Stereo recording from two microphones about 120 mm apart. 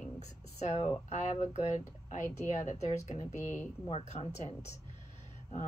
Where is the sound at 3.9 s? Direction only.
60° left (ahead or behind).